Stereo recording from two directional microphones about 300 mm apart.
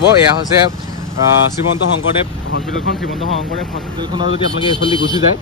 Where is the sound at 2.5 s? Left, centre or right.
Left.